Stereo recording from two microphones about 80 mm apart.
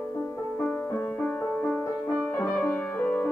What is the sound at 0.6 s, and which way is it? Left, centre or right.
Music, centre.